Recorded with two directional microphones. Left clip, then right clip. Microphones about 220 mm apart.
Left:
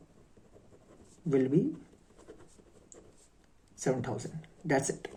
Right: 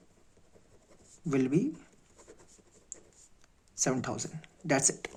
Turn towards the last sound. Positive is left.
turn(degrees=-35)  # may be behind; listen again after turning